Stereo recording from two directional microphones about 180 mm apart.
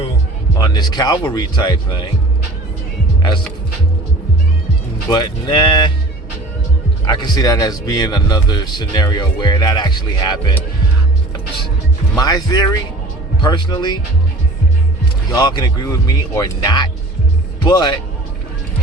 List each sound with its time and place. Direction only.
0.6 s a man's voice: 20° left (ahead or behind)
5.0 s a man's voice: 25° left (ahead or behind)
7.0 s a man's voice: 20° left (ahead or behind)
12.1 s a man's voice: 20° left (ahead or behind)
15.3 s a man's voice: 20° left (ahead or behind)